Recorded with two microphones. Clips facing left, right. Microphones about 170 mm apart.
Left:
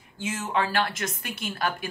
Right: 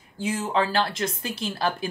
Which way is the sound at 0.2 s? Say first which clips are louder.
Right 3 dB; 30° right (ahead or behind).